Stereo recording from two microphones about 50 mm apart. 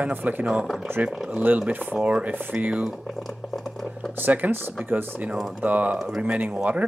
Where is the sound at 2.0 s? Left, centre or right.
Right.